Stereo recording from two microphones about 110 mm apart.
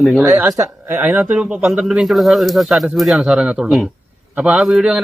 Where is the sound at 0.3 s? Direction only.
20° right (ahead or behind).